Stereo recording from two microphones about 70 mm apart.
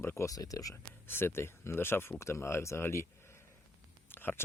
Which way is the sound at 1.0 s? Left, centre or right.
Left.